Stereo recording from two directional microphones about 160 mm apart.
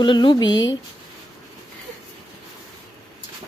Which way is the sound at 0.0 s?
30° left (ahead or behind).